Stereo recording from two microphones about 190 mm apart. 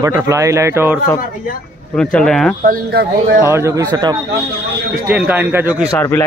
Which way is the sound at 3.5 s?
15° right (ahead or behind).